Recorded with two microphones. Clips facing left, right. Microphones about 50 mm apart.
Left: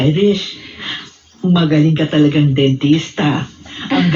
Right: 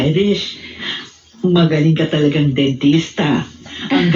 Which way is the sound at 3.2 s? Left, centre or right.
Centre.